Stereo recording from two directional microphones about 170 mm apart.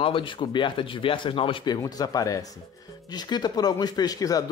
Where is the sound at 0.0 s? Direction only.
30° left (ahead or behind).